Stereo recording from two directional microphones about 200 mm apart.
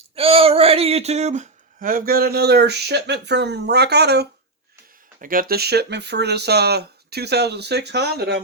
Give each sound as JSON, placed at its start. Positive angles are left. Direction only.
{"t": 0.2, "sound": "speech", "side_deg": -30}
{"t": 5.2, "sound": "speech", "side_deg": -45}